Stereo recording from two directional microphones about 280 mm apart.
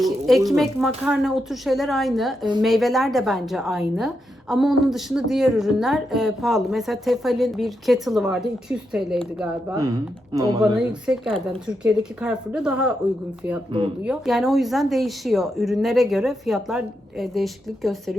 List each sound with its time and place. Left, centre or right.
0.0 s a woman's voice: centre
10.6 s a woman's voice: centre
14.0 s a woman's voice: centre